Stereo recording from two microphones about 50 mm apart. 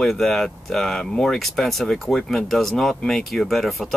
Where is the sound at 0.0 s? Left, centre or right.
Centre.